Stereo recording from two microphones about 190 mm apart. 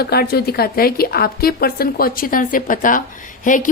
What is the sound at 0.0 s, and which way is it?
A woman's voice, 55° left (ahead or behind).